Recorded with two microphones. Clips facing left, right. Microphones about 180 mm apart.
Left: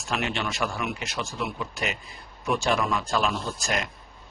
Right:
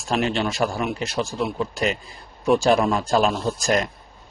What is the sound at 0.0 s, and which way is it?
Speech, 35° right (ahead or behind).